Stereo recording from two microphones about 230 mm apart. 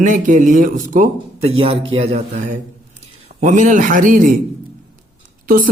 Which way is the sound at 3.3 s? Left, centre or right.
Right.